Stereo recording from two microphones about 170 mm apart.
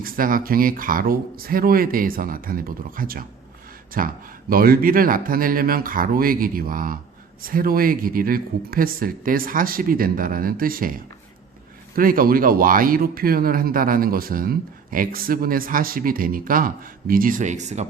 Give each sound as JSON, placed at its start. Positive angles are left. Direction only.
{"t": 0.0, "sound": "speech", "side_deg": -55}
{"t": 11.9, "sound": "speech", "side_deg": -55}